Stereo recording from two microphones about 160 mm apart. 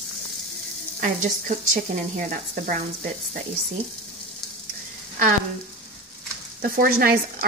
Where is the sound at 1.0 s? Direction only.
50° right (ahead or behind).